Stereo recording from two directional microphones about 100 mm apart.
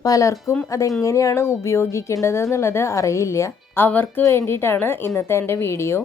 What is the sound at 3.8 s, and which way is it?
A woman's voice, 20° left (ahead or behind).